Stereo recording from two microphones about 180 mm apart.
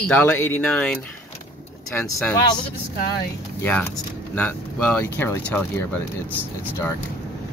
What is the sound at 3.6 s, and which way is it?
Speech, 10° left (ahead or behind).